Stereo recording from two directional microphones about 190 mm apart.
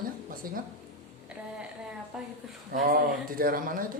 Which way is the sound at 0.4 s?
50° right (ahead or behind).